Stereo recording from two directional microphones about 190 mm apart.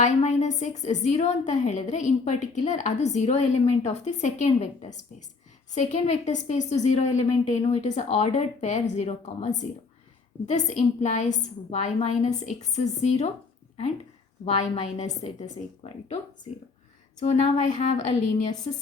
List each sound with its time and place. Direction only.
0.0 s a woman's voice: 35° left (ahead or behind)
14.4 s a woman's voice: 35° left (ahead or behind)
17.2 s a woman's voice: 35° left (ahead or behind)